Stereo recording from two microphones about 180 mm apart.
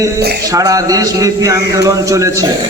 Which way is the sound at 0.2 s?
65° right (ahead or behind).